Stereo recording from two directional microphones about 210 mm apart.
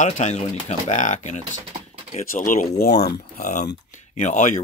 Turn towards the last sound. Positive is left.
turn(degrees=35)  # may be behind; listen again after turning